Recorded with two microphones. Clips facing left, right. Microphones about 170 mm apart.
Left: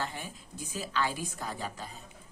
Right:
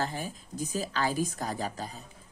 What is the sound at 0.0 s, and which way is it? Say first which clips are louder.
Speech: right 4 dB; 40° right (ahead or behind).